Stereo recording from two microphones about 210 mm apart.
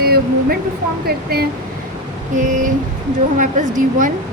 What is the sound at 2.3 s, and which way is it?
A woman's voice, 35° right (ahead or behind).